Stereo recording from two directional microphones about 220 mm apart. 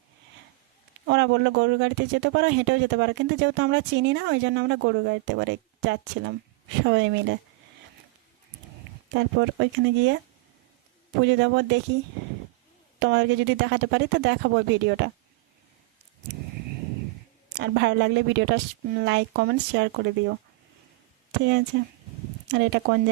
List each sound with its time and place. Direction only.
1.0 s speech: 55° right (ahead or behind)
9.1 s a woman's voice: 55° right (ahead or behind)
11.2 s a woman's voice: 55° right (ahead or behind)
13.0 s a woman's voice: 50° right (ahead or behind)
17.5 s a woman's voice: 50° right (ahead or behind)
21.3 s a woman's voice: 50° right (ahead or behind)